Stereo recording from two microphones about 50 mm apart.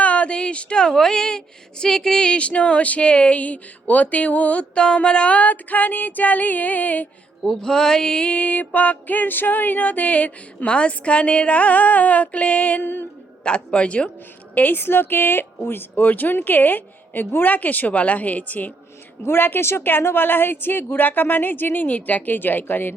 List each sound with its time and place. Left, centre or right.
0.0 s speech: left
1.8 s music: centre; by 7.1 s left
7.4 s music: centre; by 13.1 s left
13.4 s music: left
14.5 s a woman's voice: left
19.4 s a woman's voice: left